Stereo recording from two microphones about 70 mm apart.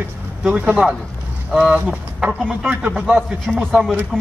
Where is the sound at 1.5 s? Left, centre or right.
Centre.